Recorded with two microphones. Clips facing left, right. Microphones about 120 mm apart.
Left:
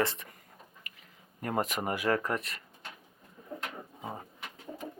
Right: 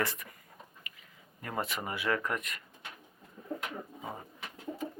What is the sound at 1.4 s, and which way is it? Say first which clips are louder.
Speech: left 4 dB; 45° left (ahead or behind).